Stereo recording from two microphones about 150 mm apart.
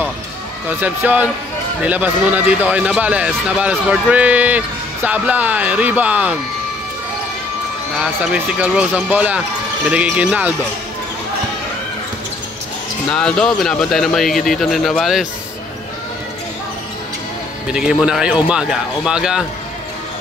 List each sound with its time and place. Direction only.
0.7 s a man's voice: 10° right (ahead or behind)
8.0 s a man's voice: 5° right (ahead or behind)
13.1 s speech: 5° left (ahead or behind)
17.7 s speech: 5° right (ahead or behind)